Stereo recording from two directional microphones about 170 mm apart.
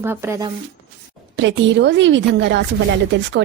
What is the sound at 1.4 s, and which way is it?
Speech, 90° right.